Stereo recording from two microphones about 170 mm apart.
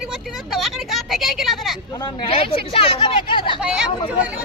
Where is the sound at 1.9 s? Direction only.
25° left (ahead or behind).